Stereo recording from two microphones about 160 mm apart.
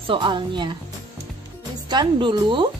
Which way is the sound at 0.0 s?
30° right (ahead or behind).